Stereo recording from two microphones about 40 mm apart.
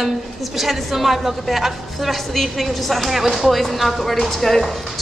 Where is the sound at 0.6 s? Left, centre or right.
Centre.